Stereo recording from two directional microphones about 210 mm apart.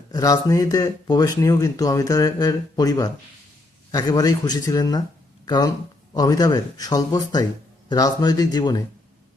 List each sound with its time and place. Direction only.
0.1 s speech: 15° left (ahead or behind)